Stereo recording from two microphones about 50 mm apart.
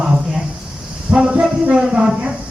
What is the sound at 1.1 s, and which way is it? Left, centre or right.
A woman's voice, right.